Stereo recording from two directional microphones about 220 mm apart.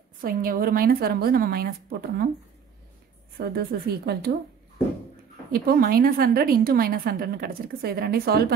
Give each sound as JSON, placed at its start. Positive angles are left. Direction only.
{"t": 0.2, "sound": "a woman's voice", "side_deg": -40}
{"t": 3.3, "sound": "a woman's voice", "side_deg": -45}
{"t": 5.5, "sound": "a woman's voice", "side_deg": -45}